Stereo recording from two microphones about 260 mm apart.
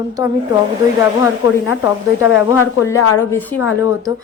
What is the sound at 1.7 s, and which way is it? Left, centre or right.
Speech, centre.